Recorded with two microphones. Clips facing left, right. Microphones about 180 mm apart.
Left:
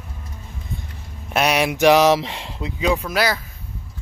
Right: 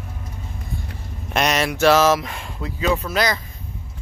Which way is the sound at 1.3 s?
10° left (ahead or behind).